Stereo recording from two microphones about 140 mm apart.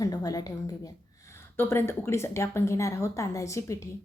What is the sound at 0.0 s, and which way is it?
Speech, 25° left (ahead or behind).